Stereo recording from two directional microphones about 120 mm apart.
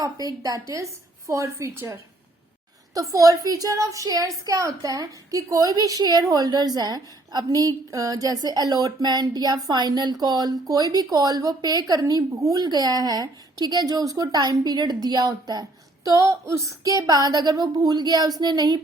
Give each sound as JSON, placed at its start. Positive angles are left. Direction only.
{"t": 0.0, "sound": "a woman's voice", "side_deg": -30}